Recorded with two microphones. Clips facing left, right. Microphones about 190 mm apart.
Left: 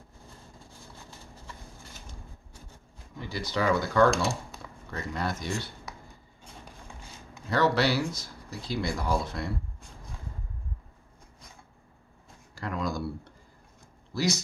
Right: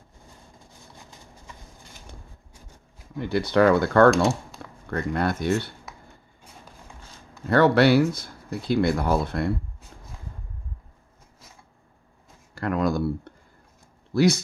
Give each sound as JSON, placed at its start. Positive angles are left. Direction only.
{"t": 3.2, "sound": "speech", "side_deg": -60}
{"t": 7.4, "sound": "speech", "side_deg": -60}
{"t": 12.5, "sound": "speech", "side_deg": -60}